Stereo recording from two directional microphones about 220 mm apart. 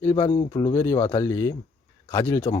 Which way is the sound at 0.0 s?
15° left (ahead or behind).